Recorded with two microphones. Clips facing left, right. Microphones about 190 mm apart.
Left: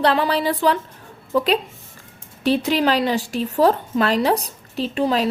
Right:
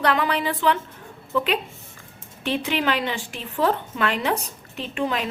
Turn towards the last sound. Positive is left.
turn(degrees=35)  # may be behind; listen again after turning